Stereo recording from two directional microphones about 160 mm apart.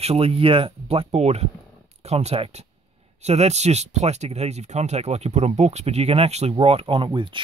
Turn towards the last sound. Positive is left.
turn(degrees=-30)  # may be behind; listen again after turning